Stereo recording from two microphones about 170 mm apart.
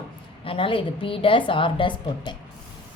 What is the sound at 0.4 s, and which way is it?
A woman's voice, 30° left (ahead or behind).